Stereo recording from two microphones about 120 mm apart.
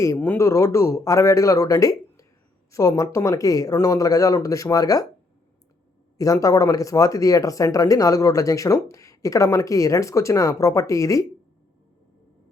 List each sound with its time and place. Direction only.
0.0 s speech: 20° left (ahead or behind)
6.1 s speech: 30° left (ahead or behind)